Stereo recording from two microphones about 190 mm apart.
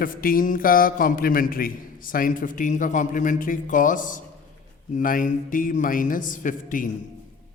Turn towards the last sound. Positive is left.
turn(degrees=45)  # may be behind; listen again after turning